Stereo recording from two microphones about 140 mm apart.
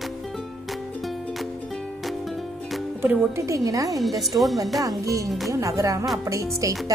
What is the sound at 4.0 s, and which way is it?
Music, centre (ahead or behind).